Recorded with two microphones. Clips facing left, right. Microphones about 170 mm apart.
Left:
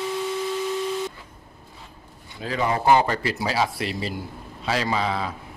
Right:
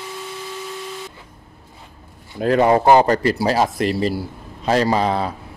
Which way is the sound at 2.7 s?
40° right (ahead or behind).